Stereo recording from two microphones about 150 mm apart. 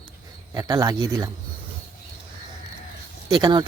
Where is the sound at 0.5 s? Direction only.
25° right (ahead or behind).